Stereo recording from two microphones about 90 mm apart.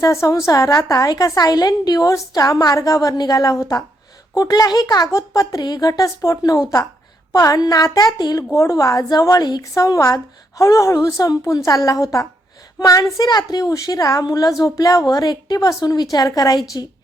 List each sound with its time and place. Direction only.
0.0 s a woman's voice: 35° left (ahead or behind)
5.9 s a woman's voice: 40° left (ahead or behind)